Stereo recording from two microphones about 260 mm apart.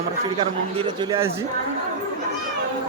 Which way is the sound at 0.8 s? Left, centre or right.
Centre.